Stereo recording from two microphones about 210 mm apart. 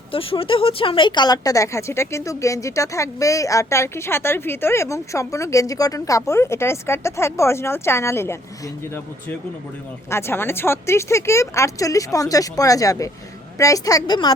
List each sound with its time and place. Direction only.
0.1 s speech: 25° left (ahead or behind)
10.1 s speech: 10° left (ahead or behind)